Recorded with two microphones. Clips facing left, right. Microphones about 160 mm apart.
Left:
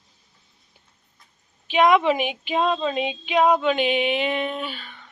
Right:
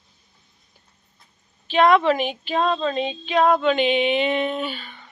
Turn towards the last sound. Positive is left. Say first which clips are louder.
# right 3 dB
turn(degrees=0)  # may be behind; listen again after turning